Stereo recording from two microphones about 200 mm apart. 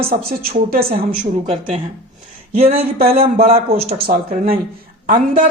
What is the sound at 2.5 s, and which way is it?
Speech, 50° right (ahead or behind).